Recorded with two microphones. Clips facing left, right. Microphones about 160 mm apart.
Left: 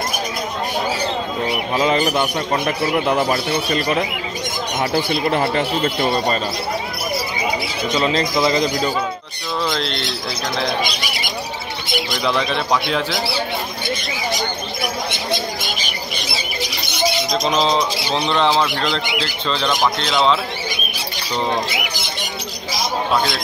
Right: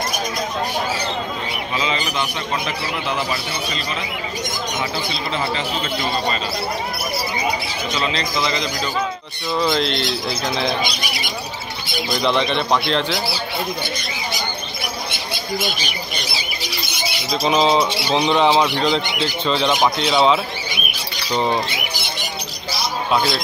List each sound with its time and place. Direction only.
1.8 s a man's voice: 55° left (ahead or behind)
8.0 s a man's voice: 45° left (ahead or behind)
9.6 s a man's voice: centre (ahead or behind)
12.2 s a man's voice: 5° left (ahead or behind)
17.3 s speech: 5° right (ahead or behind)
20.0 s speech: 5° right (ahead or behind)